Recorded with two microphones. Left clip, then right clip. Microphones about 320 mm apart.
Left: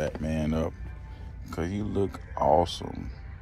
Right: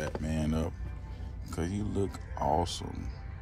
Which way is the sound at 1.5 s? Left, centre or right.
Centre.